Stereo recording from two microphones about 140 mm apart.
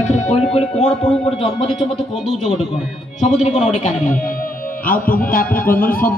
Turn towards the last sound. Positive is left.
turn(degrees=90)